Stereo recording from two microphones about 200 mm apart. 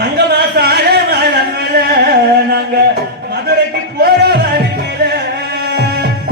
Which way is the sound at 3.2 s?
55° right (ahead or behind).